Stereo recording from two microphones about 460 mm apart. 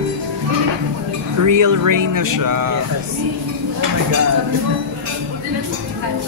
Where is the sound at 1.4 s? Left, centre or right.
Right.